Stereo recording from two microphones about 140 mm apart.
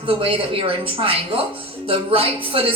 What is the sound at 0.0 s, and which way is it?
A woman's voice, 40° right (ahead or behind).